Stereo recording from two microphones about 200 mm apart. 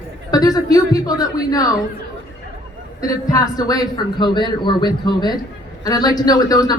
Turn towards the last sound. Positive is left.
turn(degrees=20)  # may be behind; listen again after turning